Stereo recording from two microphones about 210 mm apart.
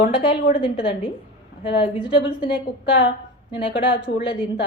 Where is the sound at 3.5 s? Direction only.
25° left (ahead or behind).